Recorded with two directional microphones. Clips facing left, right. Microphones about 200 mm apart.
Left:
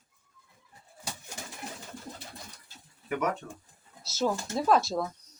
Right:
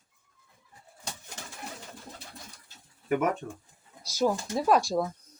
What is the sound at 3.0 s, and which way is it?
Speech, 50° right (ahead or behind).